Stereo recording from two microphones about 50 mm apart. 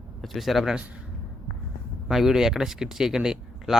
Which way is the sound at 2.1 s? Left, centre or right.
Centre.